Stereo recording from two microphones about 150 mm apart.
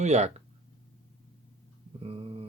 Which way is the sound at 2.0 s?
35° right (ahead or behind).